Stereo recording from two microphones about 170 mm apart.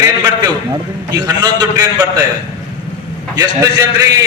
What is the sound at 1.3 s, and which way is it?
Speech, 20° right (ahead or behind).